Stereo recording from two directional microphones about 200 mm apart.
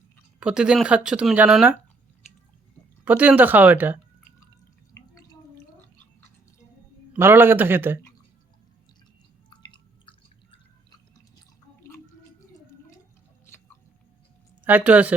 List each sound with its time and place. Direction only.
0.3 s speech: 5° right (ahead or behind)
3.0 s speech: 10° right (ahead or behind)
4.9 s drip: 15° left (ahead or behind)
7.1 s speech: 10° right (ahead or behind)
9.5 s drip: 25° left (ahead or behind)
14.6 s speech: 10° right (ahead or behind)